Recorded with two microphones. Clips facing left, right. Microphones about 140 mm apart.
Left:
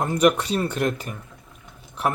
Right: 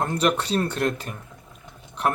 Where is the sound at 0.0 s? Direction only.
10° left (ahead or behind).